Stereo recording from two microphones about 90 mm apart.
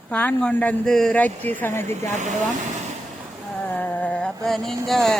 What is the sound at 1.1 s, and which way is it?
Speech, 20° left (ahead or behind).